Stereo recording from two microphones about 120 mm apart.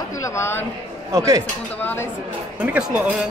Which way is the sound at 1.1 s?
25° right (ahead or behind).